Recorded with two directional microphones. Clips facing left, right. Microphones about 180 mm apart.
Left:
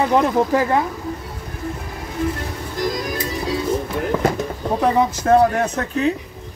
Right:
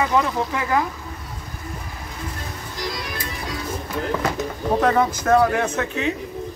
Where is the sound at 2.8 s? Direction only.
45° left (ahead or behind).